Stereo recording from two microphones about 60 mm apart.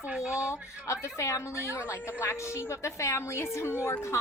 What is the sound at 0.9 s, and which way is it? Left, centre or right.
A woman's voice, left.